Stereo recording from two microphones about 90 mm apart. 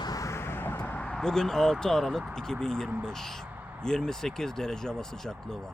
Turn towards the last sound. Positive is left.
turn(degrees=5)  # may be behind; listen again after turning